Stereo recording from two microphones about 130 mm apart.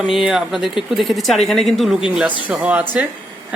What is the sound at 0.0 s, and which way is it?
A man's voice, centre (ahead or behind).